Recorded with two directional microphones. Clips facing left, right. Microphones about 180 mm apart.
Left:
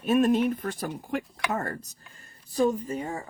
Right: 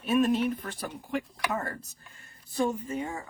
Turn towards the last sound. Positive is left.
turn(degrees=35)  # may be behind; listen again after turning